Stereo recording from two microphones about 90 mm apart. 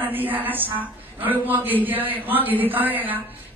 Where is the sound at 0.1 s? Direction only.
20° right (ahead or behind).